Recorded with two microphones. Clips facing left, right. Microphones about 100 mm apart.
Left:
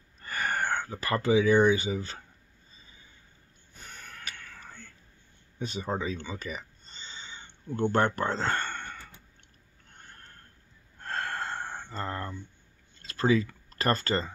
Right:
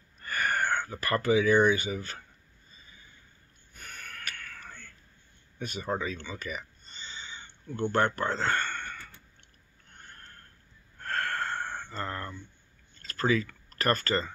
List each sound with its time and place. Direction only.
0.2 s a sound: 30° left (ahead or behind)
0.9 s speech: 25° left (ahead or behind)
3.7 s snort: 30° left (ahead or behind)
5.6 s a sound: 30° left (ahead or behind)
7.9 s speech: 35° left (ahead or behind)
11.0 s gasp: 25° left (ahead or behind)
13.5 s speech: 30° left (ahead or behind)